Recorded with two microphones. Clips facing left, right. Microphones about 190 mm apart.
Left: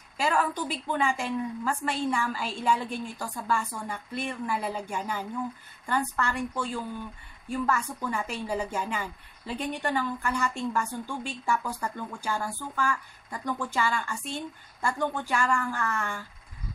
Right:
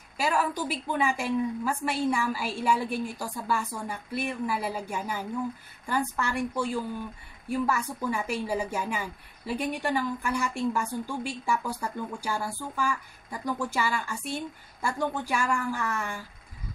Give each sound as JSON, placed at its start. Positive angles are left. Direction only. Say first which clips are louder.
{"t": 0.2, "sound": "speech", "louder": "even", "side_deg": -5}